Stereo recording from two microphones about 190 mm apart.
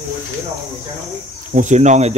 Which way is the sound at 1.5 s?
40° right (ahead or behind).